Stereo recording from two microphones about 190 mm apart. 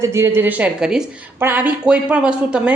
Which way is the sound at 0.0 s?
15° right (ahead or behind).